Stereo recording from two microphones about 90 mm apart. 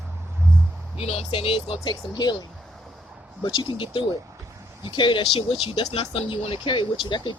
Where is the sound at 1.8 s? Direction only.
50° left (ahead or behind).